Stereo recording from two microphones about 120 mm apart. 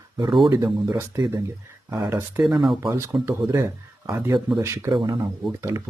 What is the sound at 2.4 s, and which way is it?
Speech, centre (ahead or behind).